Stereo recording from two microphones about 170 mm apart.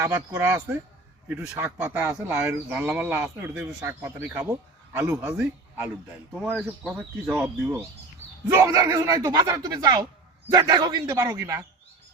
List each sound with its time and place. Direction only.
0.0 s speech: 15° right (ahead or behind)
7.3 s speech: 15° right (ahead or behind)